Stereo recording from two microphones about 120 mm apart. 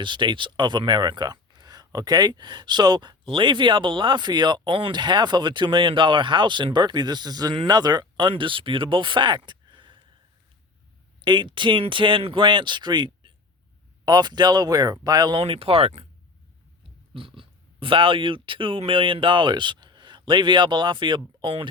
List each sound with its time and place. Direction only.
0.0 s speech: 40° right (ahead or behind)
11.2 s speech: 40° right (ahead or behind)
15.4 s speech: 50° right (ahead or behind)
17.2 s speech: 50° right (ahead or behind)